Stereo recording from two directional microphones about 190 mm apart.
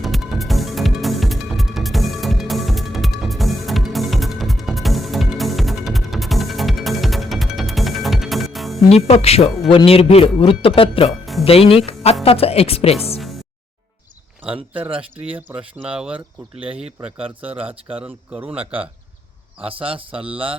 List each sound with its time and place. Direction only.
0.0 s music: centre (ahead or behind)
8.9 s speech: 35° left (ahead or behind)
14.4 s speech: 5° right (ahead or behind)
14.8 s a man's voice: 30° right (ahead or behind)
15.3 s speech: 10° right (ahead or behind)
16.8 s a man's voice: 30° right (ahead or behind)
17.4 s speech: 5° right (ahead or behind)
19.6 s a man's voice: 30° right (ahead or behind)